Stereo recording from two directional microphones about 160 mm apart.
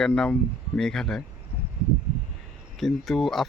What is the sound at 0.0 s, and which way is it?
Speech, 5° left (ahead or behind).